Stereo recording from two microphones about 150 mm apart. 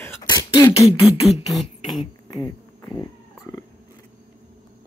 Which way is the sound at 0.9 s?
35° left (ahead or behind).